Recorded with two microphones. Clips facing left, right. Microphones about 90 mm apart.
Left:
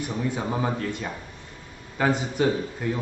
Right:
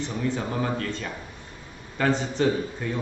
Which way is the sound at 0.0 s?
15° left (ahead or behind).